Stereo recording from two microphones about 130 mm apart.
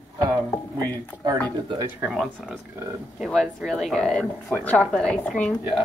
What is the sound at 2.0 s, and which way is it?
Speech, 15° right (ahead or behind).